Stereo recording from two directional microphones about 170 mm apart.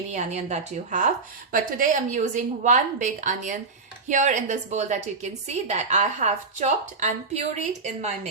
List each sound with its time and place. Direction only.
0.1 s a woman's voice: 40° right (ahead or behind)